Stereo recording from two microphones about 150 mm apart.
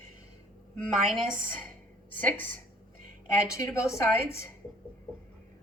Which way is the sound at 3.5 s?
20° left (ahead or behind).